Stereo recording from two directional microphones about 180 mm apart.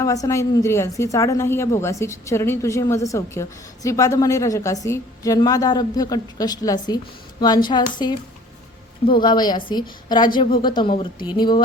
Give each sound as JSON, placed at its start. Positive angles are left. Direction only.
{"t": 0.0, "sound": "a woman's voice", "side_deg": 20}